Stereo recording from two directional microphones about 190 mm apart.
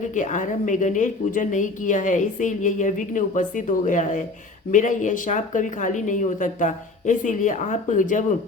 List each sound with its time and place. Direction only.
0.1 s a woman's voice: 40° left (ahead or behind)